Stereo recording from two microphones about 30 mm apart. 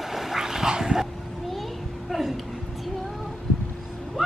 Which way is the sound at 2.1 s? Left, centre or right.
Centre.